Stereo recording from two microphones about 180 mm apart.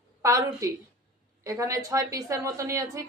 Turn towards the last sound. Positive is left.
turn(degrees=-15)  # may be behind; listen again after turning